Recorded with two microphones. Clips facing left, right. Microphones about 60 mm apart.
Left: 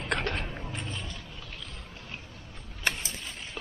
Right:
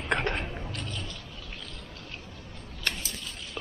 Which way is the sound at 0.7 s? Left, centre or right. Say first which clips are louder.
Even; centre.